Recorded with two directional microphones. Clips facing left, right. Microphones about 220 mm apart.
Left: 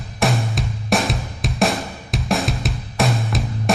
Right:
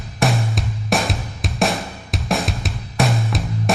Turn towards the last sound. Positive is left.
turn(degrees=0)  # may be behind; listen again after turning